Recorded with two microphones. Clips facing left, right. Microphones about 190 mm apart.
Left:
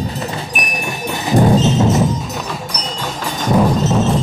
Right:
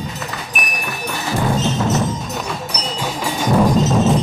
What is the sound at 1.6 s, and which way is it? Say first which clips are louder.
Music: left 5 dB; 20° left (ahead or behind).